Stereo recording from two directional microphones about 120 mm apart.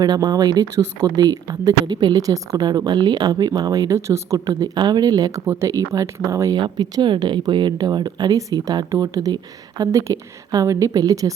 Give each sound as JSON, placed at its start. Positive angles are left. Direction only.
{"t": 0.0, "sound": "speech", "side_deg": -35}